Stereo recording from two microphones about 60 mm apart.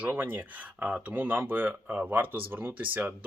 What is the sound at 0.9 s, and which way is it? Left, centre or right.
Speech, centre.